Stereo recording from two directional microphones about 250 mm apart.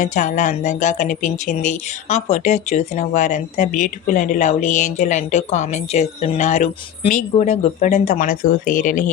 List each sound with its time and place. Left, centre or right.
0.0 s speech: left